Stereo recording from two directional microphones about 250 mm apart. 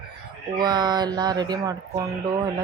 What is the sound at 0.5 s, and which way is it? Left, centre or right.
A man's voice, centre.